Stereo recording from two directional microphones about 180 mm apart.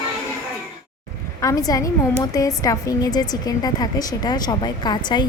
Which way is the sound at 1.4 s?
20° left (ahead or behind).